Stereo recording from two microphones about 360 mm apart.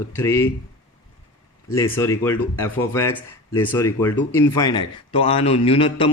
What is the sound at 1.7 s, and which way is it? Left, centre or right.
A man's voice, centre.